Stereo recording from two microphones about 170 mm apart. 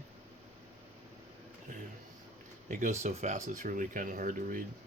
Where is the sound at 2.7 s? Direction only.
45° right (ahead or behind).